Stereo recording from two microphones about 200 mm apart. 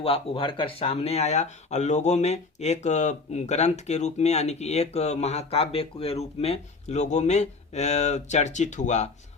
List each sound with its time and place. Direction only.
0.0 s speech: 30° left (ahead or behind)